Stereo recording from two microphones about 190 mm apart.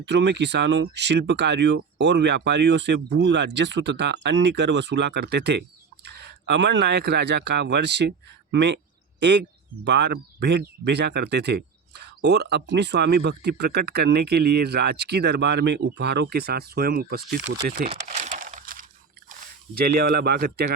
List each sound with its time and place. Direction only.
0.0 s speech: 70° right (ahead or behind)
9.8 s speech: 65° right (ahead or behind)
17.5 s speech: 75° right (ahead or behind)
17.8 s crumpling: 35° right (ahead or behind)
19.8 s speech: 55° right (ahead or behind)